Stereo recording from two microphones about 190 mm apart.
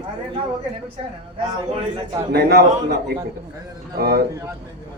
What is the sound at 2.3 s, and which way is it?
Speech, 55° right (ahead or behind).